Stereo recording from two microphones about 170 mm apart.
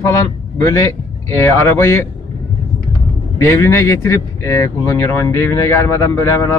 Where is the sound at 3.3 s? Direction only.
15° left (ahead or behind).